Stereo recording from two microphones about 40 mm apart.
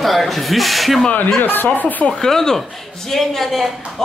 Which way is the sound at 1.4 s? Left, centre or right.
Left.